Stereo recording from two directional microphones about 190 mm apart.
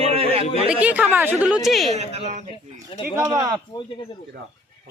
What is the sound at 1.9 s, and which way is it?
Speech, 35° right (ahead or behind).